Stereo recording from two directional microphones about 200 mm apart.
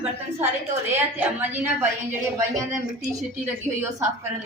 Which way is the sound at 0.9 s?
10° right (ahead or behind).